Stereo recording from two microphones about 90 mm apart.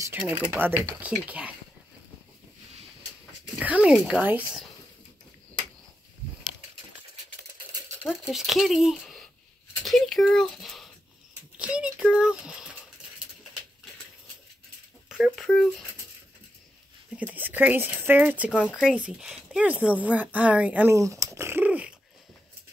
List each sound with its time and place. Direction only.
0.3 s speech: 20° right (ahead or behind)
3.5 s speech: 15° right (ahead or behind)
8.0 s speech: centre (ahead or behind)
9.8 s a sound: centre (ahead or behind)
10.3 s speech: 5° left (ahead or behind)
11.5 s a sound: 10° right (ahead or behind)
15.0 s speech: 5° right (ahead or behind)
17.2 s speech: 20° right (ahead or behind)
18.5 s speech: 15° left (ahead or behind)
18.8 s speech: 10° right (ahead or behind)
20.9 s a sound: 35° right (ahead or behind)
21.6 s dog: 15° right (ahead or behind)